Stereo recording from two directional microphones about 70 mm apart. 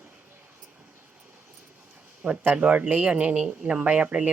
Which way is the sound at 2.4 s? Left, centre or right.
Right.